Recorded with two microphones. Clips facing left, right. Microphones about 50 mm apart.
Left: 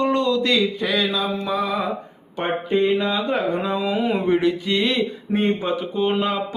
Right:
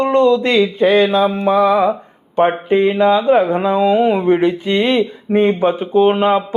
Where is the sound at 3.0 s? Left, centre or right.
Right.